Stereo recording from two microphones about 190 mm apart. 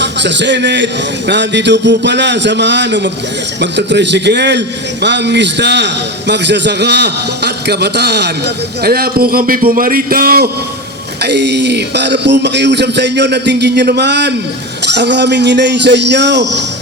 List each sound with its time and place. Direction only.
0.0 s a man's voice: 65° right (ahead or behind)